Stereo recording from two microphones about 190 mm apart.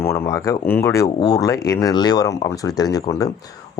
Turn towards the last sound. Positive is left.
turn(degrees=20)  # may be behind; listen again after turning